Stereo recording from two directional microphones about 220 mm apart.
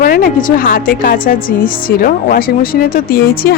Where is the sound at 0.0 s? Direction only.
40° left (ahead or behind).